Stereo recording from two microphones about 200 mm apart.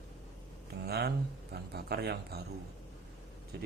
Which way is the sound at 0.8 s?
55° right (ahead or behind).